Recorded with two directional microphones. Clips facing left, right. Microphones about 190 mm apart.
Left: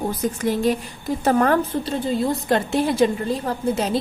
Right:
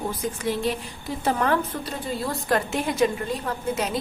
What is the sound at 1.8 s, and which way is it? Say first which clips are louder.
A woman's voice: left 7 dB; 25° left (ahead or behind).